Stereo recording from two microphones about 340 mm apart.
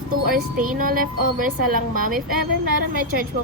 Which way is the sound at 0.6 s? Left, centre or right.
Right.